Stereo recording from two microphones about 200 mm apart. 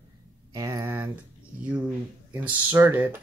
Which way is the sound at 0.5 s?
15° right (ahead or behind).